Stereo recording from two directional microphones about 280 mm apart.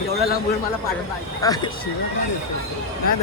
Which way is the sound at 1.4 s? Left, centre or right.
Centre.